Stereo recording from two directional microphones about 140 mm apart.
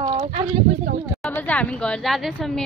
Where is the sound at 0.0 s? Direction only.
40° right (ahead or behind).